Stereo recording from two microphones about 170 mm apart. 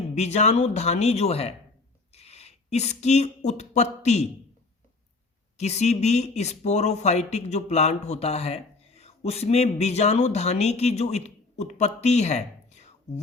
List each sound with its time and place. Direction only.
0.1 s speech: 40° left (ahead or behind)
5.5 s speech: 40° left (ahead or behind)